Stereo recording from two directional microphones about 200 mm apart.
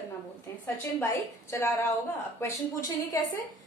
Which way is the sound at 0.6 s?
15° left (ahead or behind).